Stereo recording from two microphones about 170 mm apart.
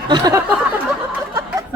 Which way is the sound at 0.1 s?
20° right (ahead or behind).